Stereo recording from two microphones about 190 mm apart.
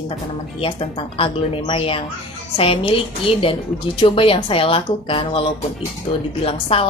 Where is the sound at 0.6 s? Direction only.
30° left (ahead or behind).